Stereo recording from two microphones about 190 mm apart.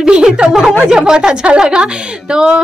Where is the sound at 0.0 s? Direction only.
5° right (ahead or behind).